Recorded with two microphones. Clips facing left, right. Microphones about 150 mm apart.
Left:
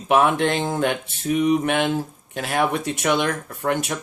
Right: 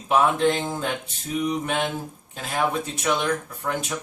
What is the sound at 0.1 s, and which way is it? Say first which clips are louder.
Speech: left 2 dB; 70° left (ahead or behind).